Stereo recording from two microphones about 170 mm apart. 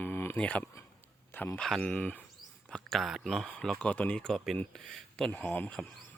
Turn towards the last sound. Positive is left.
turn(degrees=5)  # may be behind; listen again after turning